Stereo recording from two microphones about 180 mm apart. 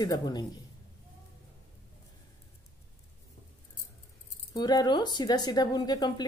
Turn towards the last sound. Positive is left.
turn(degrees=20)  # may be behind; listen again after turning